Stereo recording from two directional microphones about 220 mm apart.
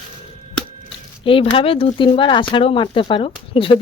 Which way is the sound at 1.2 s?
25° left (ahead or behind).